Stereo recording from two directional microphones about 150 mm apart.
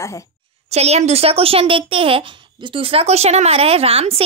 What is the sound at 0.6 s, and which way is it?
A child's voice, 45° right (ahead or behind).